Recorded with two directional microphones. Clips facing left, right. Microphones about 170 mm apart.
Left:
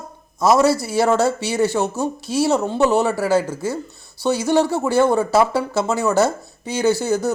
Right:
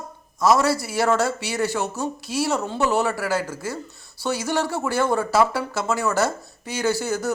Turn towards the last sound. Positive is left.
turn(degrees=20)  # may be behind; listen again after turning